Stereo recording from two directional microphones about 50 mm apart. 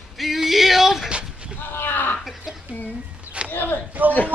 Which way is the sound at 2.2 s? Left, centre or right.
Centre.